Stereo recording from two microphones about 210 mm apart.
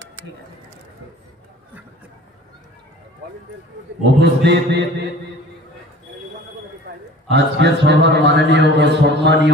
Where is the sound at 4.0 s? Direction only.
55° right (ahead or behind).